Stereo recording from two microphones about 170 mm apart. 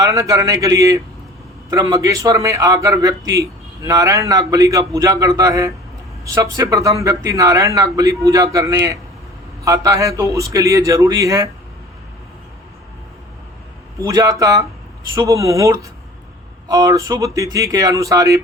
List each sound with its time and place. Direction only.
0.0 s a man's voice: 20° right (ahead or behind)
14.0 s a man's voice: 20° right (ahead or behind)